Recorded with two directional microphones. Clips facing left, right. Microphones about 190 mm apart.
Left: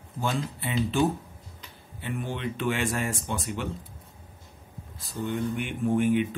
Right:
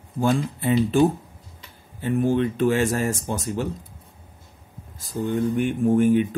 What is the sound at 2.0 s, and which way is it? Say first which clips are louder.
Speech: right 11 dB; 40° right (ahead or behind).